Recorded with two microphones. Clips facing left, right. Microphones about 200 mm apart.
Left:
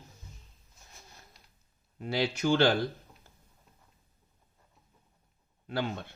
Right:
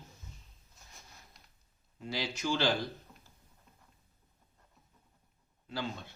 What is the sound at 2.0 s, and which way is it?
Speech, 60° left (ahead or behind).